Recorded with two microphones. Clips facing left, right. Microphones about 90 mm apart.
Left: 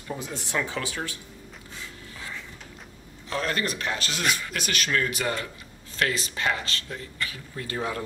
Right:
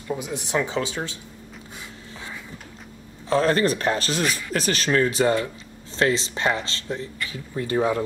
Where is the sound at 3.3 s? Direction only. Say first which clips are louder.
Right 9 dB; 35° right (ahead or behind).